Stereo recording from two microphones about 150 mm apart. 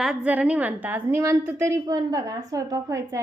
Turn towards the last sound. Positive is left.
turn(degrees=-20)  # may be behind; listen again after turning